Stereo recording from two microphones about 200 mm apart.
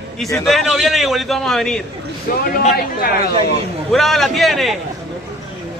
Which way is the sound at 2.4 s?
45° left (ahead or behind).